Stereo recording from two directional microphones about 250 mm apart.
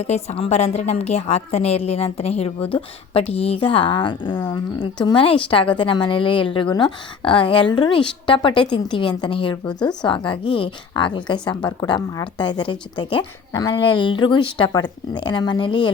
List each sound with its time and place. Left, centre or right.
0.0 s a woman's voice: left